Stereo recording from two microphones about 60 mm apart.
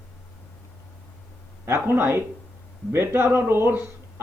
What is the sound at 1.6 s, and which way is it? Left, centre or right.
Speech, right.